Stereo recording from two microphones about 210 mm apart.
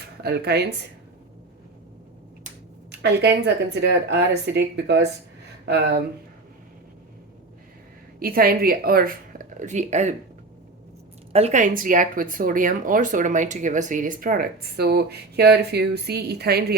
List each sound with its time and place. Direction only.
0.2 s speech: 50° right (ahead or behind)
2.9 s speech: 50° right (ahead or behind)
8.2 s speech: 45° right (ahead or behind)
11.3 s speech: 30° right (ahead or behind); by 16.7 s 50° right (ahead or behind)